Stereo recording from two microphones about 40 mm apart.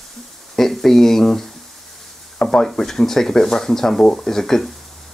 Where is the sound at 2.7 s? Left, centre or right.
Centre.